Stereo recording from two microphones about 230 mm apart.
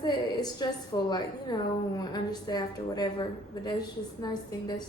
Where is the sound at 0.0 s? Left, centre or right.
Centre.